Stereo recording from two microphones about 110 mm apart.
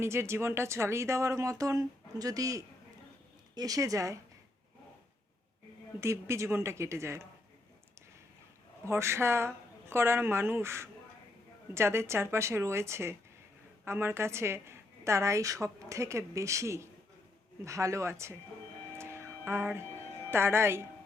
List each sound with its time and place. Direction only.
0.0 s a woman's voice: 25° right (ahead or behind)
6.0 s a woman's voice: 25° right (ahead or behind)
8.8 s a woman's voice: 25° right (ahead or behind)
18.9 s music: 25° right (ahead or behind)
20.3 s a woman's voice: 20° right (ahead or behind)